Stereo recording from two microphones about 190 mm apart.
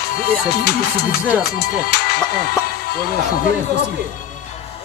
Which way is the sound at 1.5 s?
55° left (ahead or behind).